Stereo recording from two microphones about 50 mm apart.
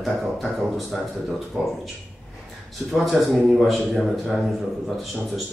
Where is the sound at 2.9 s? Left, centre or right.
Centre.